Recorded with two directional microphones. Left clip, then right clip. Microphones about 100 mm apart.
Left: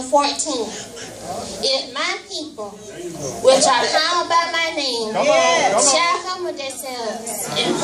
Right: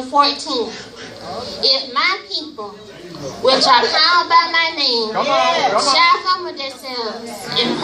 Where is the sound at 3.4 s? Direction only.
40° left (ahead or behind).